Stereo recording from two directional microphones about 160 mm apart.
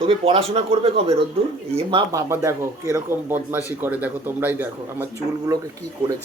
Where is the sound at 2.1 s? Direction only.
20° right (ahead or behind).